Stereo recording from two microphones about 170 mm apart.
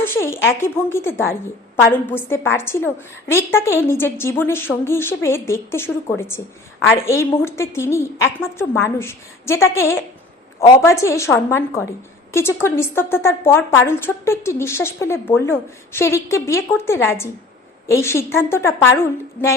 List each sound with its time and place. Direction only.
0.0 s a woman's voice: 15° left (ahead or behind)